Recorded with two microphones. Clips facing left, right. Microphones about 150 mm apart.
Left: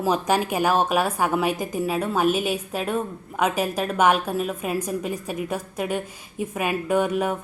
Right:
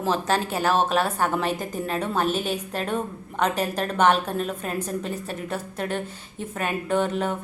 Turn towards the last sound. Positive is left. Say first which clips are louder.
# left 2 dB
turn(degrees=10)  # may be behind; listen again after turning